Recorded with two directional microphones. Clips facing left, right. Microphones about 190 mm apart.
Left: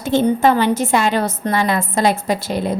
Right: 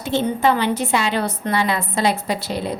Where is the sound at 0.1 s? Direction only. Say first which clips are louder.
Left 4 dB; 45° left (ahead or behind).